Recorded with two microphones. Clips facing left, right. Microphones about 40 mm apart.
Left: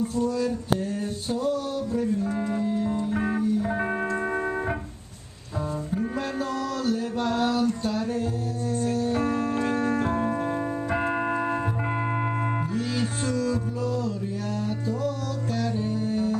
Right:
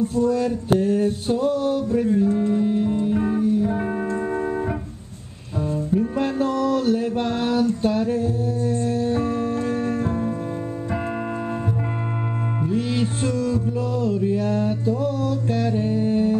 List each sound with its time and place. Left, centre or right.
0.2 s male singing: right
2.3 s music: centre
2.6 s male singing: right
3.3 s music: centre
6.1 s music: right
9.8 s music: left
13.4 s music: right